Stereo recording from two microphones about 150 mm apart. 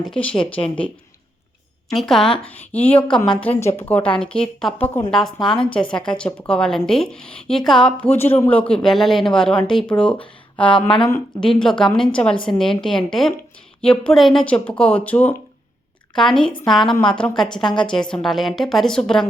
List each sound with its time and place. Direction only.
0.1 s speech: 5° left (ahead or behind)
1.9 s speech: centre (ahead or behind)
10.7 s speech: 35° left (ahead or behind)
11.3 s speech: 5° left (ahead or behind)